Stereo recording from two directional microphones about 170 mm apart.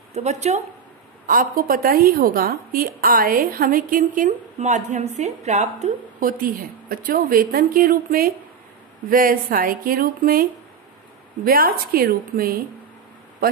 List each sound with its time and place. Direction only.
0.1 s speech: 40° right (ahead or behind)
1.2 s a woman's voice: 55° right (ahead or behind)